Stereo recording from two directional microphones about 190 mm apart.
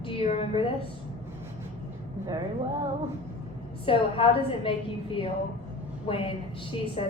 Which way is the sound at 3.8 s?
30° left (ahead or behind).